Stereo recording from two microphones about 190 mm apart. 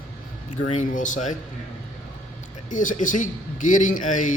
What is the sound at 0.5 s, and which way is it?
Speech, 40° left (ahead or behind).